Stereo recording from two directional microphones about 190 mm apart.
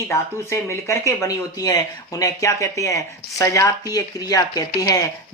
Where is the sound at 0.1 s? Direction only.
15° left (ahead or behind).